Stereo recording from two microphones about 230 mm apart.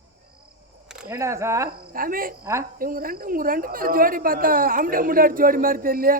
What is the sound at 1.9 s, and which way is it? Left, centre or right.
A woman's voice, right.